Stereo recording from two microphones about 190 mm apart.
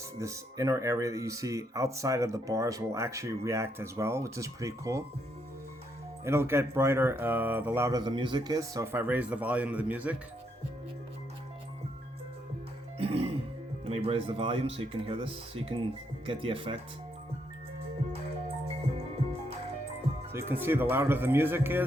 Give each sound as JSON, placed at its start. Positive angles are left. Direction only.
{"t": 0.2, "sound": "speech", "side_deg": -15}
{"t": 6.2, "sound": "speech", "side_deg": -15}
{"t": 13.0, "sound": "music", "side_deg": -30}
{"t": 13.8, "sound": "speech", "side_deg": -30}
{"t": 20.3, "sound": "speech", "side_deg": -10}